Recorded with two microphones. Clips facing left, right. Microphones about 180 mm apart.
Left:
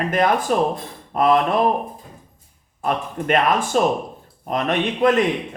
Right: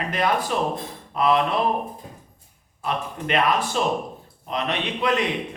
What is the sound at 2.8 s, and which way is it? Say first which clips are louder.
Speech: left 4 dB; 50° left (ahead or behind).